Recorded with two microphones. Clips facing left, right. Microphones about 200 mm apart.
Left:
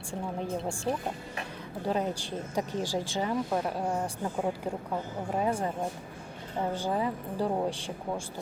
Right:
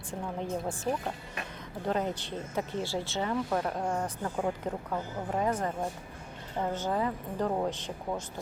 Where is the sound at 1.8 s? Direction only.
10° left (ahead or behind).